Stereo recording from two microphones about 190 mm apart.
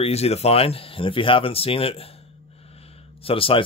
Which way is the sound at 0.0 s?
35° left (ahead or behind).